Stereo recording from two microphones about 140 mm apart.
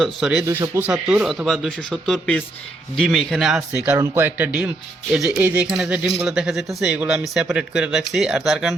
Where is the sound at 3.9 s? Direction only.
20° right (ahead or behind).